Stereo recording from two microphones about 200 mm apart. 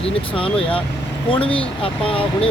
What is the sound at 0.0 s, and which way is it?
Speech, 25° left (ahead or behind).